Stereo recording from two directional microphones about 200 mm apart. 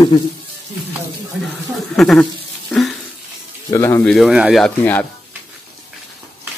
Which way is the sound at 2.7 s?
Centre (ahead or behind).